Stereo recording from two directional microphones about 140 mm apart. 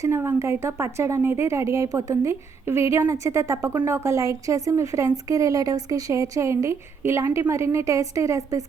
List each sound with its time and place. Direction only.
0.0 s speech: 20° right (ahead or behind)